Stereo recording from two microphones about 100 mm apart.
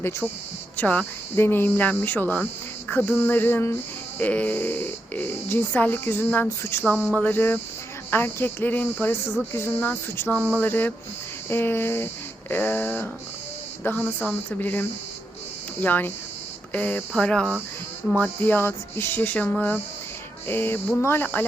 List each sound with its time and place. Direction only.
0.8 s speech: 15° left (ahead or behind)
18.2 s speech: 20° left (ahead or behind)